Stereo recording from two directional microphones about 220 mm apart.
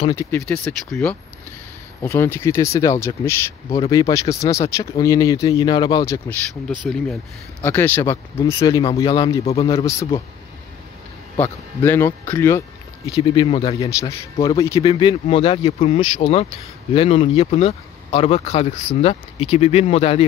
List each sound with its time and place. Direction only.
0.1 s speech: 10° left (ahead or behind)
6.7 s speech: centre (ahead or behind); by 9.8 s 25° left (ahead or behind)
9.8 s speech: 15° left (ahead or behind)
11.3 s speech: 10° left (ahead or behind); by 13.8 s 25° left (ahead or behind)
14.4 s speech: 15° left (ahead or behind)